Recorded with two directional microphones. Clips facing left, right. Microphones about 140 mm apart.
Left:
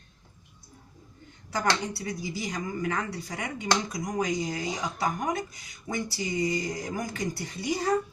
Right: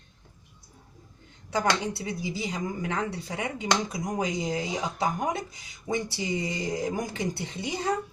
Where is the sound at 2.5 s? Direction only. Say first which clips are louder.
Left 2 dB; 25° right (ahead or behind).